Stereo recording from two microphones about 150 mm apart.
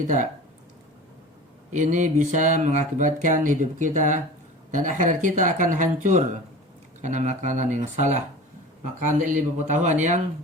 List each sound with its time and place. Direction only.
1.7 s a man's voice: 55° right (ahead or behind)